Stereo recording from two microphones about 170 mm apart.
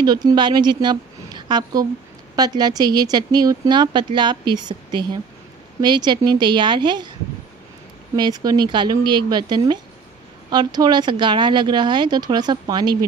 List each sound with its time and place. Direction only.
0.0 s a woman's voice: 25° right (ahead or behind)
8.2 s speech: 25° right (ahead or behind)